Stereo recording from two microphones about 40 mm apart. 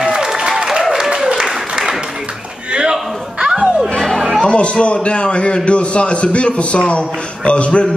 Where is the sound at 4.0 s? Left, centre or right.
Centre.